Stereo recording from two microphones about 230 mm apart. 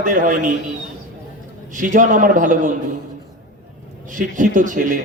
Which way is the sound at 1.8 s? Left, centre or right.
Right.